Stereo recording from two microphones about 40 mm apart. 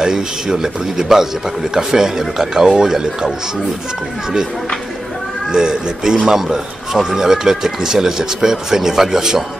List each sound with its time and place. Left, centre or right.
0.0 s speech: centre
5.5 s speech: centre